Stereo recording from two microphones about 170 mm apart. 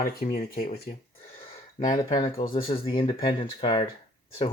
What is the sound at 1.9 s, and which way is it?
Speech, 25° left (ahead or behind).